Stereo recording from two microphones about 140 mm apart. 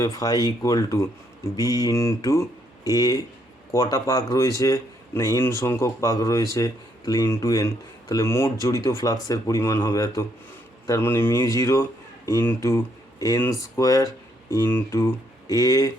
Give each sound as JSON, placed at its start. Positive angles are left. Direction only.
{"t": 0.0, "sound": "speech", "side_deg": 25}